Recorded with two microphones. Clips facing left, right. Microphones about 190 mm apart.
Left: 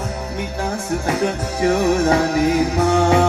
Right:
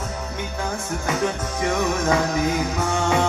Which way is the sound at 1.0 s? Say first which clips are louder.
Left 2 dB; 30° left (ahead or behind).